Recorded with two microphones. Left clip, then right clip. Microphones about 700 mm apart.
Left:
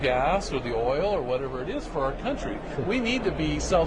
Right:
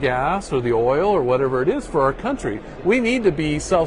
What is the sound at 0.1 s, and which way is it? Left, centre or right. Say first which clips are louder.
A man's voice: right 3 dB; right.